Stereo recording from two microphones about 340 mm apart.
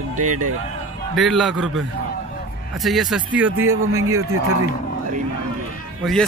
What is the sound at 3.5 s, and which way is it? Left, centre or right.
Speech, right.